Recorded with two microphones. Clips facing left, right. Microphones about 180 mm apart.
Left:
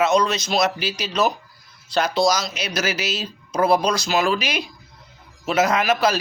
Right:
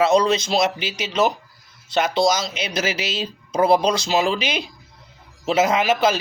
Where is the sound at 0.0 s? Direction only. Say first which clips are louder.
Right 2 dB; 30° right (ahead or behind).